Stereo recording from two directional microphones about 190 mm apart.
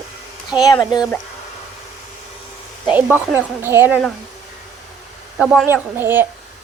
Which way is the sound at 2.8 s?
10° right (ahead or behind).